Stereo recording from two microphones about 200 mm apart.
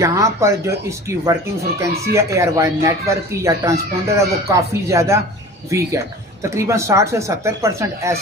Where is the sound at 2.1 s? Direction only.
15° right (ahead or behind).